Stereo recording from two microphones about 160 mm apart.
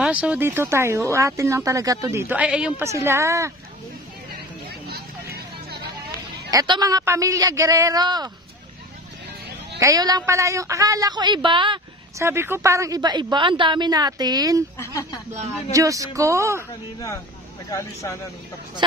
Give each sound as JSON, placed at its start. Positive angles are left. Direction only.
{"t": 0.0, "sound": "speech", "side_deg": -5}
{"t": 6.5, "sound": "a woman's voice", "side_deg": -25}
{"t": 9.8, "sound": "a woman's voice", "side_deg": -20}
{"t": 12.2, "sound": "a woman's voice", "side_deg": -15}
{"t": 14.8, "sound": "speech", "side_deg": 15}
{"t": 15.7, "sound": "a woman's voice", "side_deg": -20}
{"t": 17.6, "sound": "speech", "side_deg": 20}